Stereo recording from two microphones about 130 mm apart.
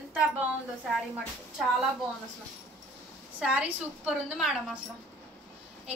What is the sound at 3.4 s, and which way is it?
A woman's voice, 5° right (ahead or behind).